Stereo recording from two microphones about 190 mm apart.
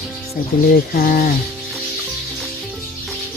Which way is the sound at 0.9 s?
50° left (ahead or behind).